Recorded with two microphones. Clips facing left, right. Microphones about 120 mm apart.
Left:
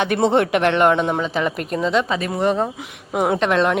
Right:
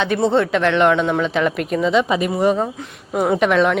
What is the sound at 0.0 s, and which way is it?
Speech, 60° left (ahead or behind).